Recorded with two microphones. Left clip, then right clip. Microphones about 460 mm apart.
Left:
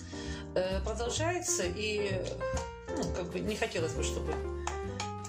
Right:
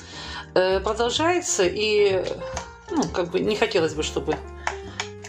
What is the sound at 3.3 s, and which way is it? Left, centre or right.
A woman's voice, right.